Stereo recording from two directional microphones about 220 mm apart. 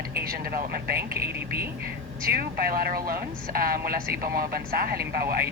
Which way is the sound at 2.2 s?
45° right (ahead or behind).